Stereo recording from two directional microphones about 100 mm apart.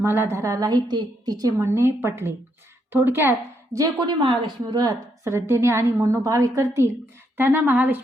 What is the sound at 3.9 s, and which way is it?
A woman's voice, 55° right (ahead or behind).